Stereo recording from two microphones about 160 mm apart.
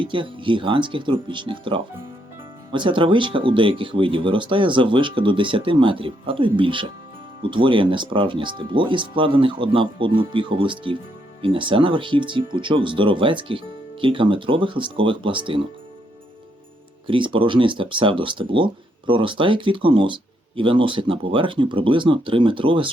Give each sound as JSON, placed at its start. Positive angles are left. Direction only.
{"t": 0.0, "sound": "speech", "side_deg": -30}
{"t": 17.1, "sound": "speech", "side_deg": -30}